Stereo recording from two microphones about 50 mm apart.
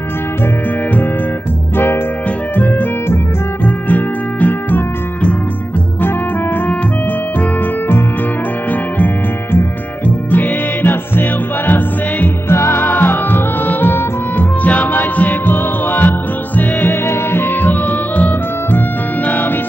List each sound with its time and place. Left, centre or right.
3.6 s music: left
10.0 s music: left
12.4 s music: left